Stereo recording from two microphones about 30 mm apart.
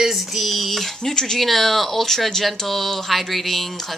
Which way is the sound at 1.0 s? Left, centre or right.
Centre.